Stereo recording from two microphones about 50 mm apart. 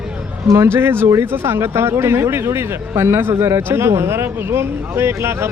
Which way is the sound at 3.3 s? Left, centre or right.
Right.